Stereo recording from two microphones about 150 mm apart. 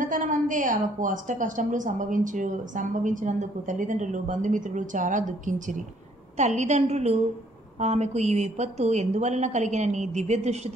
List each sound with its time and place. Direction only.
0.0 s a woman's voice: 60° right (ahead or behind)